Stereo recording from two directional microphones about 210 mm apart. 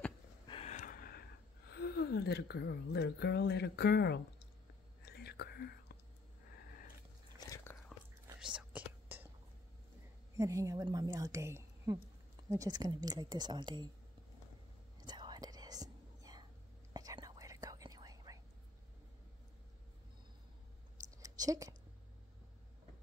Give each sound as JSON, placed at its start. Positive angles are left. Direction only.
{"t": 0.5, "sound": "a sound", "side_deg": 30}
{"t": 1.7, "sound": "speech", "side_deg": 50}
{"t": 5.0, "sound": "whispering", "side_deg": 50}
{"t": 7.3, "sound": "biting", "side_deg": 15}
{"t": 8.4, "sound": "whispering", "side_deg": -5}
{"t": 10.3, "sound": "a woman's voice", "side_deg": -15}
{"t": 15.0, "sound": "whispering", "side_deg": -20}
{"t": 21.2, "sound": "a sound", "side_deg": -15}